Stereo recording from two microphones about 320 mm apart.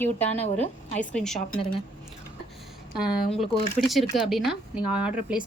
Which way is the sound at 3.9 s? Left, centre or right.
Centre.